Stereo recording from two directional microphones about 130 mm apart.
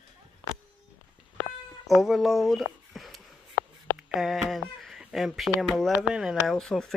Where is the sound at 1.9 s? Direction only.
Centre (ahead or behind).